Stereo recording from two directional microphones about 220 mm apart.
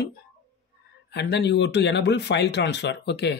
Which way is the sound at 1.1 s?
50° left (ahead or behind).